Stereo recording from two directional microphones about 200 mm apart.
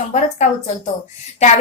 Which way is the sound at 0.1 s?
35° left (ahead or behind).